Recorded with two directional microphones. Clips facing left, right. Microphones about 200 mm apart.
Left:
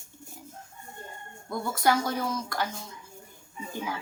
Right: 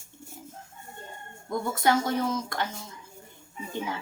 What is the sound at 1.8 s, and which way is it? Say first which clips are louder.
Speech: right 1 dB; 20° right (ahead or behind).